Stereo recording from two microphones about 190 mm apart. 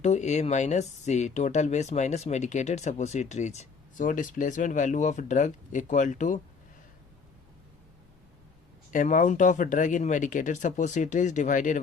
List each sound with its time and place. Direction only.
0.0 s speech: 35° left (ahead or behind)
8.9 s speech: 45° left (ahead or behind)